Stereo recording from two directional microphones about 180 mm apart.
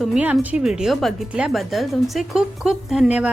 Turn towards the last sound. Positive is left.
turn(degrees=-5)  # may be behind; listen again after turning